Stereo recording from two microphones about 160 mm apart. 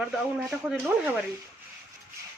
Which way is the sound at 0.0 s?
5° right (ahead or behind).